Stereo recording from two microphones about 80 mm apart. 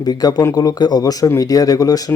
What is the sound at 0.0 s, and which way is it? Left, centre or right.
Speech, left.